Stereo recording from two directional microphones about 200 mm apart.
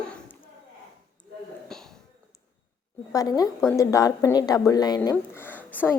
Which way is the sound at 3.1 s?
15° left (ahead or behind).